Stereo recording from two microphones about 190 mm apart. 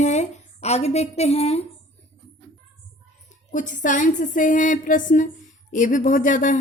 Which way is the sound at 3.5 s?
40° left (ahead or behind).